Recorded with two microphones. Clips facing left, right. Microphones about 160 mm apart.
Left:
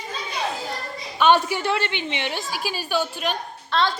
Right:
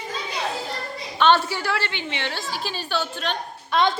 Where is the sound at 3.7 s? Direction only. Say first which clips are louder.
Right 2 dB; 15° right (ahead or behind).